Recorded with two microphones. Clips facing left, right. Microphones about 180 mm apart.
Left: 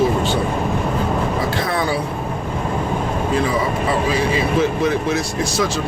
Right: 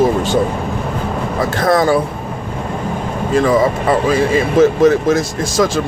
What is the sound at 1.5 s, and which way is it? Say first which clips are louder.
Speech: right 7 dB; 45° right (ahead or behind).